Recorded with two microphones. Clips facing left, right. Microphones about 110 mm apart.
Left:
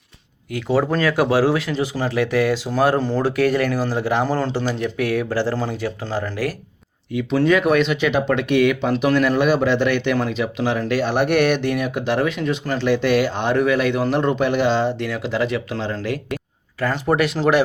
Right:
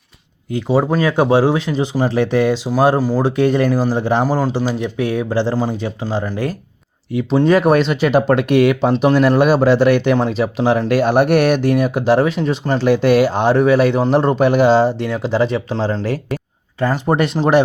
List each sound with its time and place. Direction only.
0.5 s speech: 15° right (ahead or behind)
2.6 s speech: 10° right (ahead or behind)
3.2 s speech: 25° right (ahead or behind)
4.2 s speech: 10° right (ahead or behind)
7.1 s speech: 40° right (ahead or behind)
9.0 s speech: 30° right (ahead or behind)
9.2 s a man's voice: 45° right (ahead or behind)
10.8 s speech: 45° right (ahead or behind); by 12.8 s 30° right (ahead or behind)
12.8 s speech: 45° right (ahead or behind)